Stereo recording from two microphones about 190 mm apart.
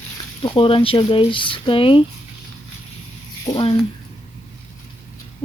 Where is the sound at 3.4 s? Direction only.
25° left (ahead or behind).